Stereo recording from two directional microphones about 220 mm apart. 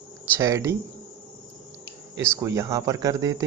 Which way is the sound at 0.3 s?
15° right (ahead or behind).